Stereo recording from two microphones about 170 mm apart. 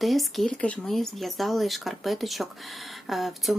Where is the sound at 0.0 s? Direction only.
Centre (ahead or behind).